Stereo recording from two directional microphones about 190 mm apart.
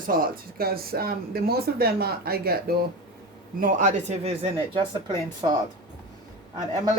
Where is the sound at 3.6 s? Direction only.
40° right (ahead or behind); by 5.5 s 25° right (ahead or behind).